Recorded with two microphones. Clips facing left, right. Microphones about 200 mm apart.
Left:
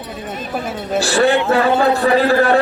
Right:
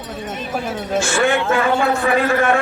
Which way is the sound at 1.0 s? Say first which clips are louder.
Left 5 dB; 35° left (ahead or behind).